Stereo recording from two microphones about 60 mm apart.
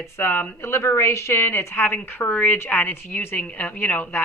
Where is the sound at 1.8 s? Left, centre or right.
Left.